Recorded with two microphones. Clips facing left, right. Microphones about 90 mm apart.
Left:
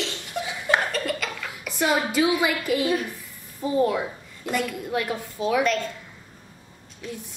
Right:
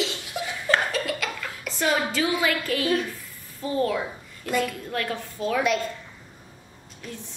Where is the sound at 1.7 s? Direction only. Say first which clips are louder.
Left 1 dB; 15° left (ahead or behind).